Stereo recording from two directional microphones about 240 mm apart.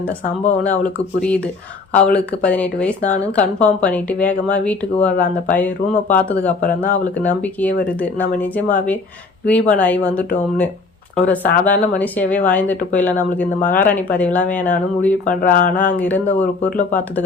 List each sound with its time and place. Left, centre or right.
0.4 s speech: centre
11.3 s speech: centre
15.4 s speech: left
16.0 s speech: centre
16.6 s speech: left